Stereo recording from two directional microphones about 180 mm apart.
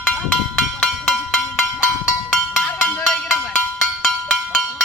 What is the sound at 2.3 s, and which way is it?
Music, 5° left (ahead or behind).